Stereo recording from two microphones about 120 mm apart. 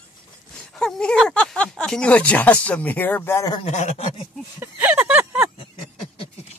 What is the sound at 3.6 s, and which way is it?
Speech, 70° left (ahead or behind).